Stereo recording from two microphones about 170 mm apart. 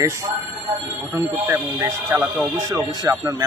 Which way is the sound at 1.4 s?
15° right (ahead or behind).